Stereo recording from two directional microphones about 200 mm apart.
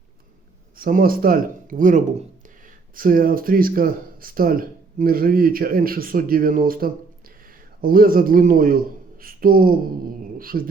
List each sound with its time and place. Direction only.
0.8 s speech: 45° right (ahead or behind)